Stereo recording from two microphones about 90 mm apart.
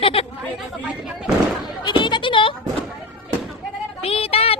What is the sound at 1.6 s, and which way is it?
Bleat, 60° left (ahead or behind).